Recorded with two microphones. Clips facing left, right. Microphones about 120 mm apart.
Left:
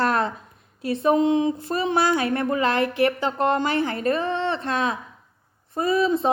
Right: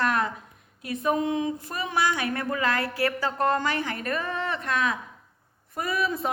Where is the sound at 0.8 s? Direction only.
30° left (ahead or behind).